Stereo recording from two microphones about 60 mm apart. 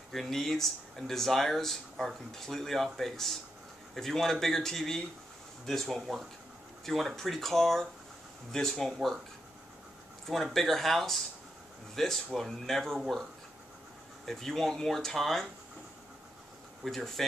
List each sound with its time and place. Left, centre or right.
0.1 s speech: centre
10.2 s speech: centre
14.2 s speech: centre
16.8 s speech: centre